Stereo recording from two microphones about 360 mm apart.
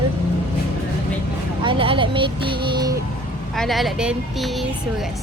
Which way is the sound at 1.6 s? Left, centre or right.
Centre.